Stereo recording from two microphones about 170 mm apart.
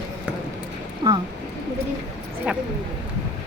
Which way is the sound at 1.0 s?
30° right (ahead or behind).